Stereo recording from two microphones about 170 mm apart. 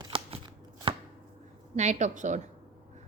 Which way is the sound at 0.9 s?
30° right (ahead or behind).